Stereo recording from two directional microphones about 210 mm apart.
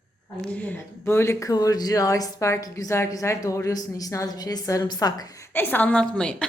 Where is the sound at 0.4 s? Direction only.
5° left (ahead or behind).